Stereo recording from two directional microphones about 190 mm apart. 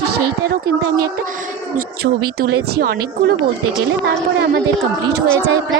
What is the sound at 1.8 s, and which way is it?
A woman's voice, 55° right (ahead or behind).